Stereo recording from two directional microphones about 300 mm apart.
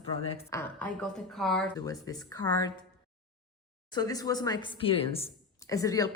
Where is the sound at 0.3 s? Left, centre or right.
Centre.